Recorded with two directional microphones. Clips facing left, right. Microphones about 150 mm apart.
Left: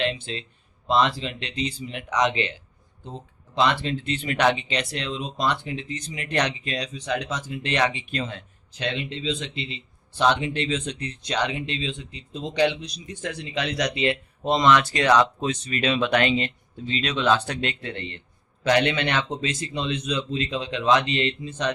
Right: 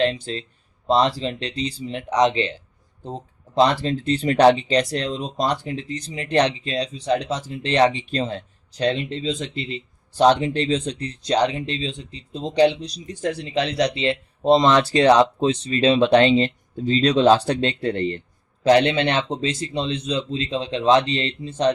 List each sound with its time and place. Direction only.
0.0 s speech: 40° right (ahead or behind)